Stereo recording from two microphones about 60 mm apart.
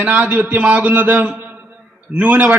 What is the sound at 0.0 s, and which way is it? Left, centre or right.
A man's voice, right.